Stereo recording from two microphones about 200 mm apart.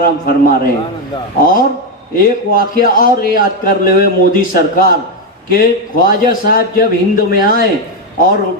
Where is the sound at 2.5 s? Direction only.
45° left (ahead or behind).